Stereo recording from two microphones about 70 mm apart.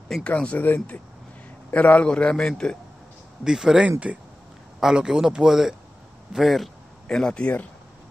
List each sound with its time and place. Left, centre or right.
0.2 s a man's voice: centre
3.4 s speech: centre
6.3 s a sound: centre
7.2 s a man's voice: centre